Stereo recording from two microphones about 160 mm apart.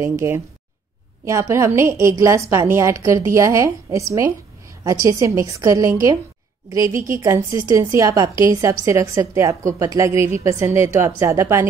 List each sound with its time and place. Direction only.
0.0 s a woman's voice: 15° right (ahead or behind)